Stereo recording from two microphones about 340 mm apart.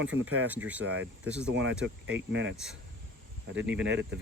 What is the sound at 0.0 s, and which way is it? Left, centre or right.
Speech, right.